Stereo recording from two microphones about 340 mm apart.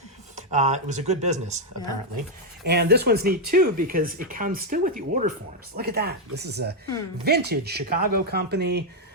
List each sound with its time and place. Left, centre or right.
0.3 s speech: centre
2.6 s speech: right